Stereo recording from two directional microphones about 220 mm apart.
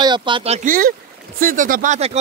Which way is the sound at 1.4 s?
40° right (ahead or behind).